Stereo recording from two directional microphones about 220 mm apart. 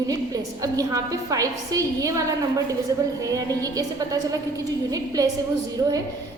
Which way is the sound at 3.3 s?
15° right (ahead or behind).